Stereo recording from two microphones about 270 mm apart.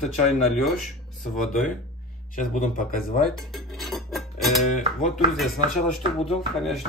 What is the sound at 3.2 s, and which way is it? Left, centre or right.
Dishes, centre.